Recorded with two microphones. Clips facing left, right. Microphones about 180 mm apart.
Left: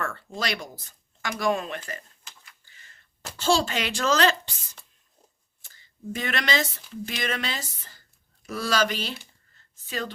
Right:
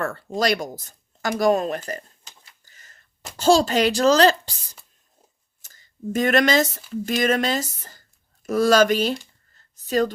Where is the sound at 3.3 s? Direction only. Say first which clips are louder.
Right 7 dB; 40° right (ahead or behind).